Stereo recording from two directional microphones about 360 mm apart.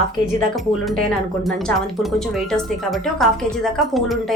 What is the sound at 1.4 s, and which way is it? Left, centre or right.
A woman's voice, centre.